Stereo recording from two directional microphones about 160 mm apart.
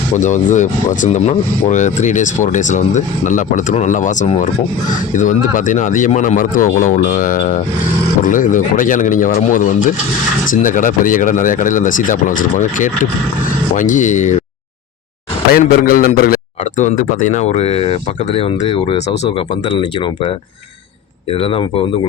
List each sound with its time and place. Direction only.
0.2 s speech: 50° left (ahead or behind)
15.5 s speech: 60° left (ahead or behind)
16.8 s speech: 50° left (ahead or behind)
21.4 s speech: 35° left (ahead or behind)